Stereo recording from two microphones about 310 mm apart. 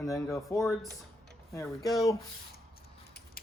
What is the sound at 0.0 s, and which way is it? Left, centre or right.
Speech, centre.